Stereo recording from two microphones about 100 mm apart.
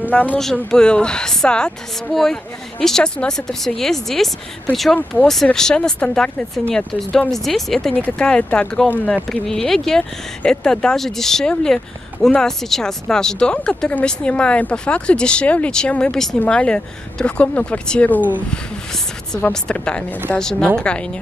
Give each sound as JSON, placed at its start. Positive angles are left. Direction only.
{"t": 0.1, "sound": "speech", "side_deg": 15}
{"t": 7.9, "sound": "speech", "side_deg": 15}
{"t": 19.3, "sound": "speech", "side_deg": 10}